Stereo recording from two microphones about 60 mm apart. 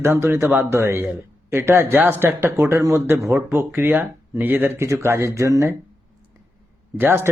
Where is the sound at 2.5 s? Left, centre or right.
Right.